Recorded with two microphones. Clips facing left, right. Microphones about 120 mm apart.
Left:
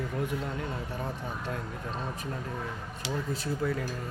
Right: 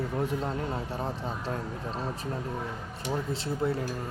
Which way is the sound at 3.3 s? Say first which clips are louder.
Even; 25° right (ahead or behind).